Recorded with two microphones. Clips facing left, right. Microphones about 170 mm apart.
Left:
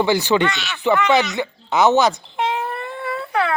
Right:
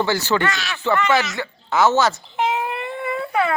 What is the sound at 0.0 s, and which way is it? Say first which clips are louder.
Speech: left 3 dB; 15° left (ahead or behind).